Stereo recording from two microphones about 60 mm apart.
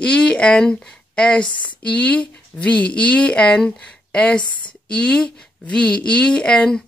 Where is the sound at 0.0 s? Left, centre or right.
Centre.